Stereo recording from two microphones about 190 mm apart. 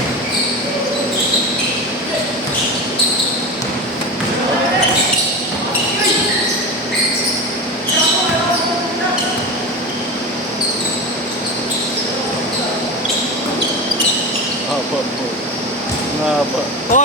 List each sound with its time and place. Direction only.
16.9 s air conditioning: 45° left (ahead or behind)